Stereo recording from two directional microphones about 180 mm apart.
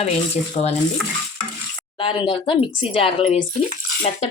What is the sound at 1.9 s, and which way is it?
Speech, 30° left (ahead or behind).